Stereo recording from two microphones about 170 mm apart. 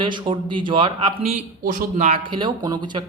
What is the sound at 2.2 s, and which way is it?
Speech, 25° right (ahead or behind).